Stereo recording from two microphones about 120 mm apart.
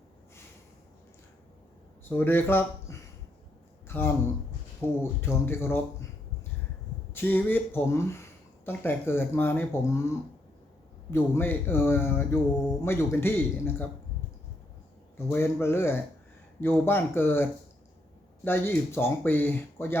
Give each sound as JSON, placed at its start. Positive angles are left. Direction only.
{"t": 2.0, "sound": "a man's voice", "side_deg": 15}
{"t": 7.1, "sound": "speech", "side_deg": 15}
{"t": 11.1, "sound": "speech", "side_deg": 20}
{"t": 15.3, "sound": "speech", "side_deg": 20}